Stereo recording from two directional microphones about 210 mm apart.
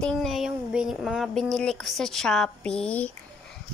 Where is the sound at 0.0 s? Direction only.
Centre (ahead or behind).